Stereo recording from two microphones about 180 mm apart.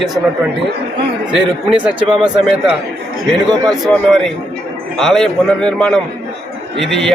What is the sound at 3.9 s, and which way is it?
A man's voice, centre (ahead or behind).